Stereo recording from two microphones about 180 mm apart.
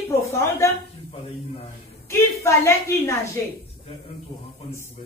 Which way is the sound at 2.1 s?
15° left (ahead or behind).